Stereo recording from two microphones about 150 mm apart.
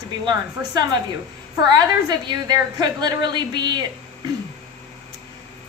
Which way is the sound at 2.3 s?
30° right (ahead or behind).